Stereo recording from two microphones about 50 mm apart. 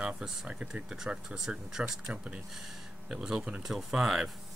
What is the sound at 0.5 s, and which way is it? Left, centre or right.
Speech, right.